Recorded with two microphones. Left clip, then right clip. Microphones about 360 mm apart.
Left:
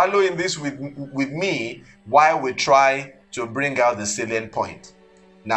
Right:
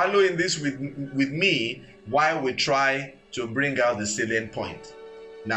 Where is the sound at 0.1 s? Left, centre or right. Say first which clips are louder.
Left 2 dB; left.